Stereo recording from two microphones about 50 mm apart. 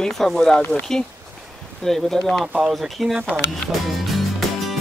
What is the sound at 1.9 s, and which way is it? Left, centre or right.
Speech, centre.